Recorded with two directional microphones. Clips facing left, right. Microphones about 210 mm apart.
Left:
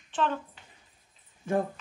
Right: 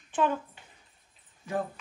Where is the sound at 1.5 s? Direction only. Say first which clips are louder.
Left 4 dB; 50° left (ahead or behind).